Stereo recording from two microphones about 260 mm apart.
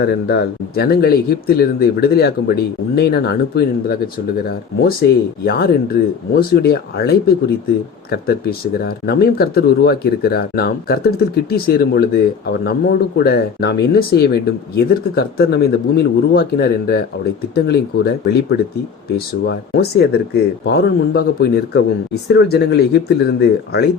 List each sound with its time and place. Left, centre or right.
0.0 s speech: left
5.5 s speech: left